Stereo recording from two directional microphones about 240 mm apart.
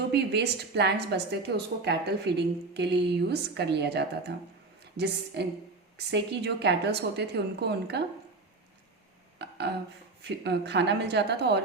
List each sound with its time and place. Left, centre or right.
0.1 s a woman's voice: right
9.4 s a sound: right
10.2 s a woman's voice: right